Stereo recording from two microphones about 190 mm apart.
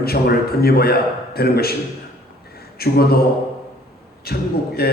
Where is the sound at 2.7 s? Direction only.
55° left (ahead or behind).